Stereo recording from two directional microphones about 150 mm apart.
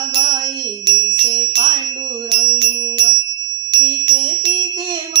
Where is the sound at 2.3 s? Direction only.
30° right (ahead or behind).